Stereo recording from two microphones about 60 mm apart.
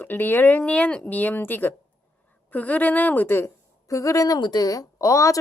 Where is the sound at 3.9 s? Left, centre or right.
Left.